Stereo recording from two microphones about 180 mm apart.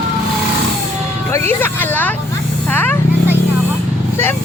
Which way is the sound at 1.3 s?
15° left (ahead or behind).